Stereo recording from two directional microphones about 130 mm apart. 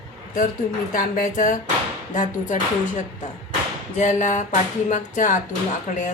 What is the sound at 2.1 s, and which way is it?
Speech, 75° left (ahead or behind).